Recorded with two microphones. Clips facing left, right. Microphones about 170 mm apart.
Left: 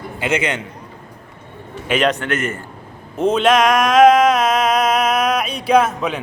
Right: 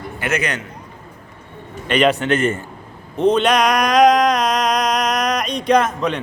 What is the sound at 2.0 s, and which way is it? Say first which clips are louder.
Speech: right 2 dB; 15° right (ahead or behind).